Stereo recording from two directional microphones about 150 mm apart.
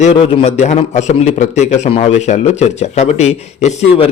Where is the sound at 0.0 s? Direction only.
50° left (ahead or behind).